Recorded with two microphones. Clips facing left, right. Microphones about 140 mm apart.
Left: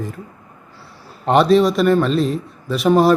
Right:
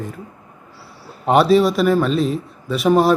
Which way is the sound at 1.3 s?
5° right (ahead or behind).